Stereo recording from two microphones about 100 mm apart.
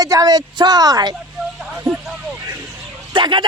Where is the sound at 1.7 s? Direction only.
20° right (ahead or behind).